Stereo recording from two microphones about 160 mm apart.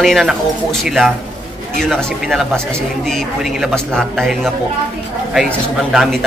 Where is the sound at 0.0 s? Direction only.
Centre (ahead or behind).